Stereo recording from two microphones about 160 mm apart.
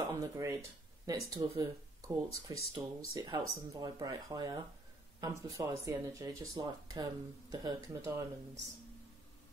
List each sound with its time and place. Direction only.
0.1 s speech: 20° right (ahead or behind)